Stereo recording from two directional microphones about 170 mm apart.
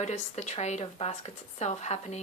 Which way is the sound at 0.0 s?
45° left (ahead or behind).